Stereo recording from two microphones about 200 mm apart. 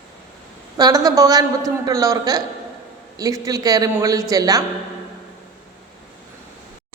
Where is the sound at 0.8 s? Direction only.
20° right (ahead or behind).